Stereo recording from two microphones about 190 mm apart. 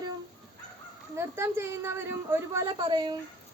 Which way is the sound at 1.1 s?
15° right (ahead or behind).